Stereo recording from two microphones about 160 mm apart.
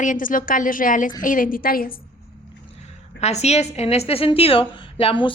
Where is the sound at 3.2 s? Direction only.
45° left (ahead or behind).